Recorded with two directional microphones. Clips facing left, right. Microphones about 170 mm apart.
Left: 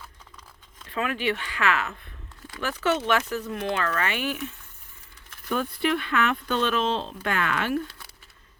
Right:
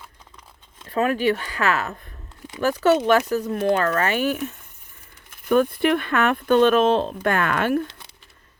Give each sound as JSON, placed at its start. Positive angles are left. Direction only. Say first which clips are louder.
{"t": 0.9, "sound": "speech", "louder": "right 7 dB", "side_deg": -40}
{"t": 5.5, "sound": "speech", "louder": "right 7 dB", "side_deg": -55}
{"t": 7.9, "sound": "a sound", "louder": "right 2 dB", "side_deg": -20}